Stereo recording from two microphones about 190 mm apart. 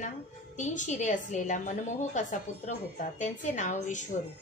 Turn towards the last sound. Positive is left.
turn(degrees=40)  # may be behind; listen again after turning